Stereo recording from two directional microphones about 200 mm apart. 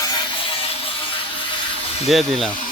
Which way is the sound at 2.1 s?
Centre (ahead or behind).